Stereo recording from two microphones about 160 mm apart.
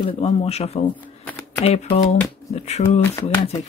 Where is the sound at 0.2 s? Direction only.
45° left (ahead or behind).